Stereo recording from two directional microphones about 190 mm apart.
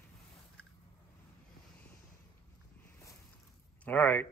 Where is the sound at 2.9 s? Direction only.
15° left (ahead or behind).